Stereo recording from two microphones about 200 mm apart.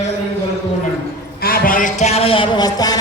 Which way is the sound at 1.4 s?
45° left (ahead or behind).